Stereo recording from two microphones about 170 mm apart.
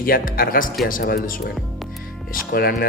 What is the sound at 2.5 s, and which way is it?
Speech, 60° left (ahead or behind).